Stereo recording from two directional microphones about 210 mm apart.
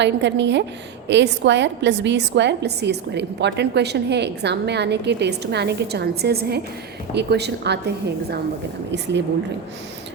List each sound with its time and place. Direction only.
0.0 s a woman's voice: 55° right (ahead or behind)